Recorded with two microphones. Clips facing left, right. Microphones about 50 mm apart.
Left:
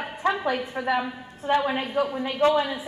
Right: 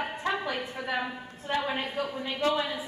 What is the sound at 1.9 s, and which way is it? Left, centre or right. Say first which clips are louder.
Speech: left 7 dB; left.